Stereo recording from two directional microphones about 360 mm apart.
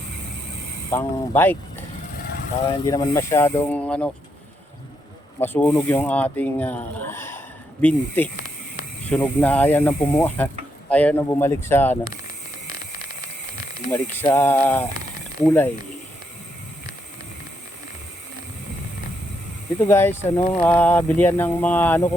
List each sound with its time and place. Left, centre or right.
0.9 s speech: centre
2.8 s speech: centre
5.4 s speech: centre
13.9 s speech: centre
19.8 s speech: centre